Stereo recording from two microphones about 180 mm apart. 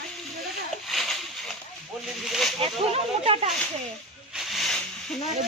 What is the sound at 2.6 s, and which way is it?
Speech, 35° right (ahead or behind).